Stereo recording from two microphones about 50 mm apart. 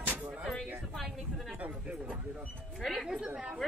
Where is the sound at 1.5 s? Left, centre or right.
Right.